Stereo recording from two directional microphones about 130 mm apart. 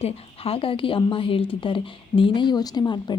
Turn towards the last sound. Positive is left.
turn(degrees=35)  # may be behind; listen again after turning